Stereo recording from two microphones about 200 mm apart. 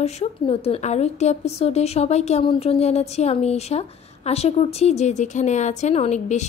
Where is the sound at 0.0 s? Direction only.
30° left (ahead or behind).